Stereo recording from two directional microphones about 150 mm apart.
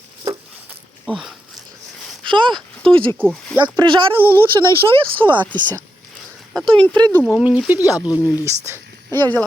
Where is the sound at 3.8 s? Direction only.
35° right (ahead or behind).